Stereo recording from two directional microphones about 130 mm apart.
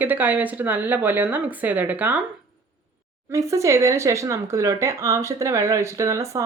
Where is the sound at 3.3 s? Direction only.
25° right (ahead or behind).